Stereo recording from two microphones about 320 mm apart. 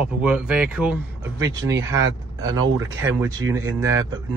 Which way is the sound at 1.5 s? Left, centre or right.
Right.